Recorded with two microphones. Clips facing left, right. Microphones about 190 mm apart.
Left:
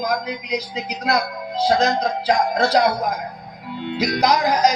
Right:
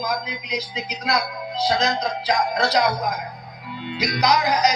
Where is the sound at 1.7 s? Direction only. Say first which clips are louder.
Left 4 dB; 55° left (ahead or behind).